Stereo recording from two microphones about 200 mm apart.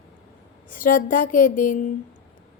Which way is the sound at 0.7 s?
45° left (ahead or behind).